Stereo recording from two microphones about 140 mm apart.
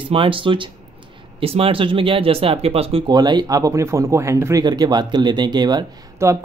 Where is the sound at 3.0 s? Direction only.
30° right (ahead or behind).